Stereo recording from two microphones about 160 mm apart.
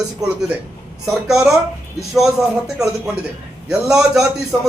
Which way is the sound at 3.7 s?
5° right (ahead or behind).